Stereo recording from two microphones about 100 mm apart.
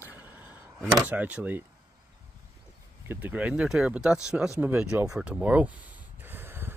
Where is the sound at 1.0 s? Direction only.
15° right (ahead or behind).